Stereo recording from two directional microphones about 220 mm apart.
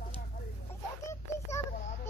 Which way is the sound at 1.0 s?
15° left (ahead or behind).